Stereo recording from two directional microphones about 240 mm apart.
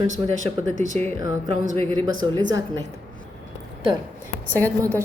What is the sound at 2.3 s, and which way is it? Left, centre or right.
Speech, centre.